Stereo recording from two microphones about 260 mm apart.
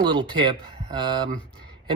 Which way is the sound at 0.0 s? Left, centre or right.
Centre.